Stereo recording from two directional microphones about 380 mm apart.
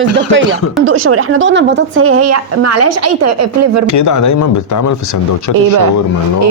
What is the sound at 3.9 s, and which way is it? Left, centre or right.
Speech, left.